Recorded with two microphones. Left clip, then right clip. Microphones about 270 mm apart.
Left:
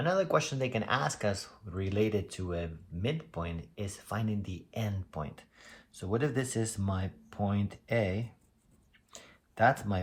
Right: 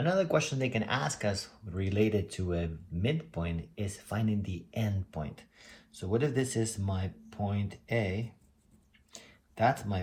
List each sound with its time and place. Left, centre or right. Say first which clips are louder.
0.0 s speech: even; centre
9.2 s computer keyboard: left 2 dB; left